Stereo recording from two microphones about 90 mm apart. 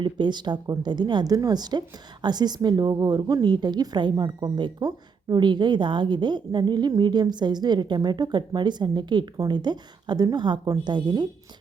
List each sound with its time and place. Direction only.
0.0 s a woman's voice: 55° right (ahead or behind)